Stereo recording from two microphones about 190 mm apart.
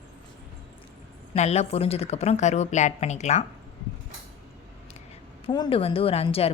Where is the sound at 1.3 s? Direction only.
35° left (ahead or behind).